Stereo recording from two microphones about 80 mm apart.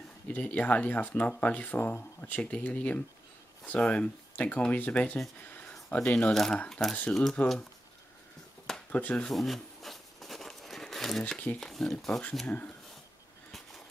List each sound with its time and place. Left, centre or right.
0.3 s speech: centre
5.5 s a sound: left
5.9 s speech: centre
8.9 s speech: centre
9.3 s a sound: centre
11.7 s speech: centre
12.4 s speech: centre